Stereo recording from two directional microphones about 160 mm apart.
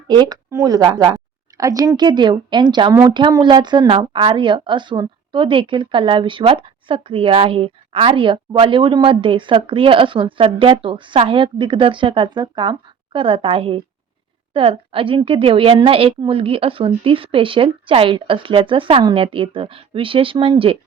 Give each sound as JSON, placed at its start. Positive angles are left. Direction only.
{"t": 0.1, "sound": "a woman's voice", "side_deg": -25}